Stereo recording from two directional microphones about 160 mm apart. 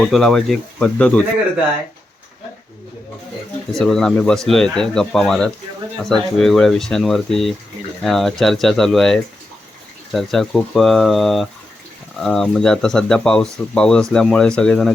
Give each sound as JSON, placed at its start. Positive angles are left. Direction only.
{"t": 0.0, "sound": "speech", "side_deg": 5}
{"t": 3.8, "sound": "speech", "side_deg": 5}